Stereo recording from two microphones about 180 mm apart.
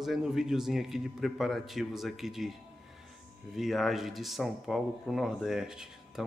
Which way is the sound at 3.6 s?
Centre (ahead or behind).